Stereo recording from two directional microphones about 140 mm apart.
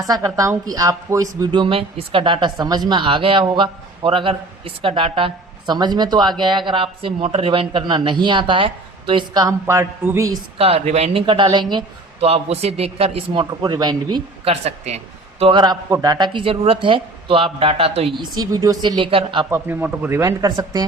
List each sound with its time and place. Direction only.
0.0 s speech: 25° right (ahead or behind)
10.6 s speech: 45° right (ahead or behind)
12.3 s speech: 45° right (ahead or behind)
13.4 s speech: 30° right (ahead or behind)
14.4 s speech: 50° right (ahead or behind)
15.5 s speech: 30° right (ahead or behind)
19.5 s speech: 15° right (ahead or behind)